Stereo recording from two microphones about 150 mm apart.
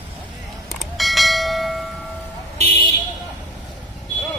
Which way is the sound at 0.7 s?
Centre (ahead or behind).